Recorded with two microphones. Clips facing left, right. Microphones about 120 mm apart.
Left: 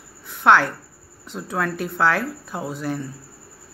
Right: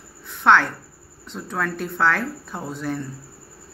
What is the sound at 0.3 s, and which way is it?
A woman's voice, 5° left (ahead or behind).